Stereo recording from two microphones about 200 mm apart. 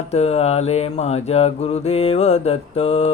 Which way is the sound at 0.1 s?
30° left (ahead or behind).